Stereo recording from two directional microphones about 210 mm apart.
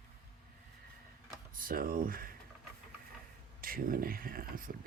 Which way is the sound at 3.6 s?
45° right (ahead or behind).